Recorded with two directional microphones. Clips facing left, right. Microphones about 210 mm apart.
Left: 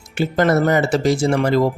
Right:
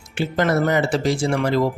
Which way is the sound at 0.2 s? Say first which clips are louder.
Left 3 dB; 45° left (ahead or behind).